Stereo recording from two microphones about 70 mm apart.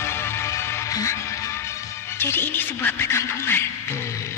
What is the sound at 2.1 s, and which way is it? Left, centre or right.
Speech, left.